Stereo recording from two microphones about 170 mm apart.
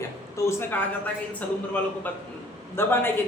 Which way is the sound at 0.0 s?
15° left (ahead or behind).